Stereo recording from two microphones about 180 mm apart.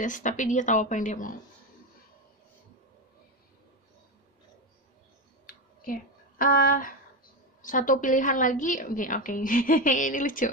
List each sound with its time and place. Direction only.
0.0 s a woman's voice: 45° left (ahead or behind)
5.5 s a sound: 50° left (ahead or behind)
7.6 s a woman's voice: 45° left (ahead or behind)